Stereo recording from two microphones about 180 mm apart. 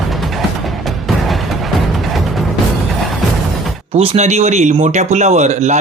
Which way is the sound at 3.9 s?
35° right (ahead or behind).